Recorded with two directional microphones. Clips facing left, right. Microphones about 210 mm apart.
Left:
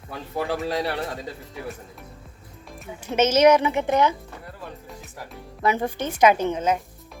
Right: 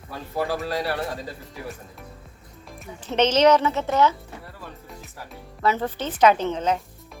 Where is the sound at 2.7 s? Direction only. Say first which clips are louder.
Left 1 dB; 5° left (ahead or behind).